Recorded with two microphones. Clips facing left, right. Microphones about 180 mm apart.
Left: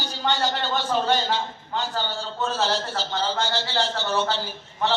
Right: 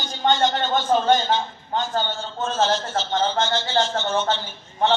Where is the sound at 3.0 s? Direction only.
35° left (ahead or behind).